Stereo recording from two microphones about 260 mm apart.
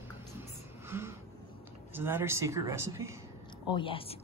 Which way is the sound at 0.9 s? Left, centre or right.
Centre.